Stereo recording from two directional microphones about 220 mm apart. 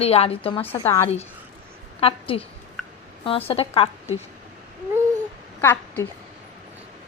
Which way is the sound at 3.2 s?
25° left (ahead or behind).